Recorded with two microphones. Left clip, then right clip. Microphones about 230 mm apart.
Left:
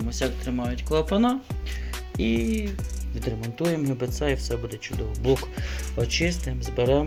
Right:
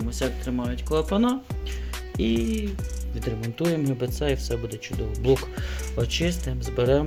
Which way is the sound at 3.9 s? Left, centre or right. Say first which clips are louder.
Even; centre.